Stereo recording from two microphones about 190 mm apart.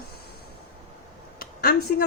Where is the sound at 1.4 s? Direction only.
50° left (ahead or behind).